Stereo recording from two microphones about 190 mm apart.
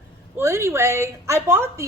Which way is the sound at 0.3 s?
15° right (ahead or behind).